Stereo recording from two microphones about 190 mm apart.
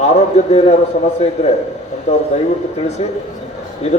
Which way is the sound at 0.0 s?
35° left (ahead or behind).